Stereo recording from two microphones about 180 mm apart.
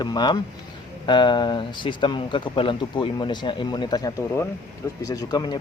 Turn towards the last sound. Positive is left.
turn(degrees=20)  # may be behind; listen again after turning